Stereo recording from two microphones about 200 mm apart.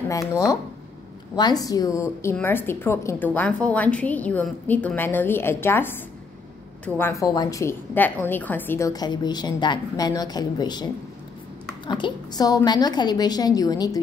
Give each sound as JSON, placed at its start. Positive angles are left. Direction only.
{"t": 0.3, "sound": "a woman's voice", "side_deg": 20}